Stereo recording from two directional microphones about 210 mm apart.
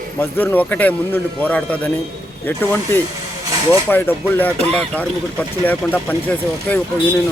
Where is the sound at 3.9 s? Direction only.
10° left (ahead or behind).